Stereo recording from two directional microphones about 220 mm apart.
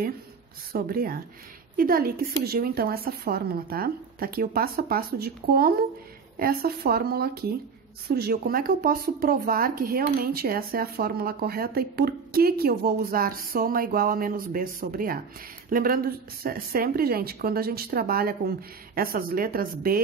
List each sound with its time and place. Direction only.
0.7 s speech: 40° right (ahead or behind)